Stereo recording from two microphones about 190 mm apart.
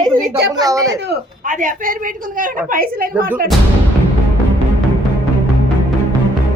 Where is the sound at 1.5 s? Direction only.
45° right (ahead or behind).